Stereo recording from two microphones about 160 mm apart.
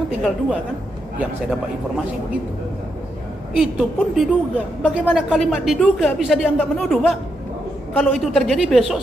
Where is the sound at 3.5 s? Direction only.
5° right (ahead or behind).